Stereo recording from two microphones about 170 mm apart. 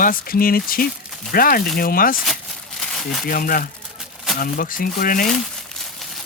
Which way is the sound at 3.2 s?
55° left (ahead or behind).